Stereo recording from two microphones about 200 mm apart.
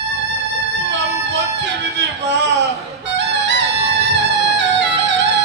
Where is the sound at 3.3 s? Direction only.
60° right (ahead or behind).